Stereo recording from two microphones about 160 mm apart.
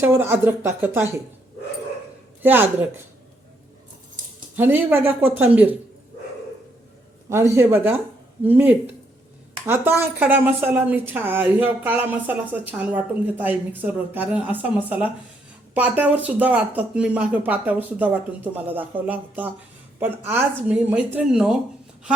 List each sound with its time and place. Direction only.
0.0 s speech: 15° right (ahead or behind)
2.4 s speech: 10° right (ahead or behind)
4.5 s speech: 10° right (ahead or behind)
7.3 s speech: 15° right (ahead or behind)